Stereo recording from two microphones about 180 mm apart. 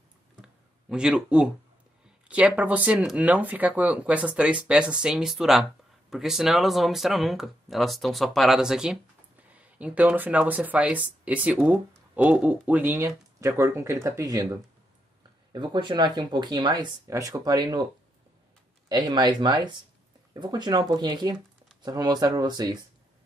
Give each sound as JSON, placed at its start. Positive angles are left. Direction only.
{"t": 0.4, "sound": "a sound", "side_deg": -5}
{"t": 2.2, "sound": "speech", "side_deg": -5}
{"t": 18.9, "sound": "speech", "side_deg": -25}